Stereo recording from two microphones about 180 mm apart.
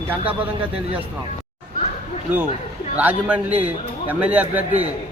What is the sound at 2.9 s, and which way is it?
A man's voice, 10° right (ahead or behind).